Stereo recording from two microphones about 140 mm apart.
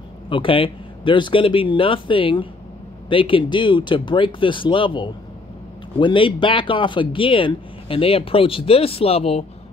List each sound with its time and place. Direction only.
0.3 s speech: 40° left (ahead or behind)